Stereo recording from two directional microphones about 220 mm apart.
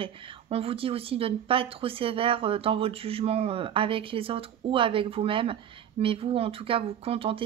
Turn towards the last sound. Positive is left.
turn(degrees=-25)  # may be behind; listen again after turning